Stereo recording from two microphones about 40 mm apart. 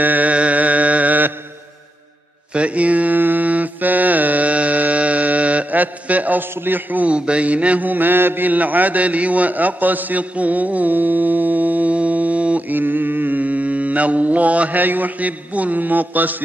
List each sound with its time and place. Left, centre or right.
0.0 s mantra: right
0.3 s a sound: right
2.5 s mantra: right
3.2 s mantra: right
6.5 s a man's voice: right
7.1 s mantra: right
12.6 s mantra: right